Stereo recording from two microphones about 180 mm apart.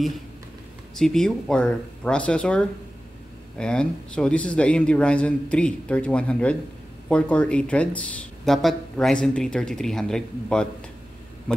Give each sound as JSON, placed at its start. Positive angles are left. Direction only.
{"t": 0.9, "sound": "speech", "side_deg": 5}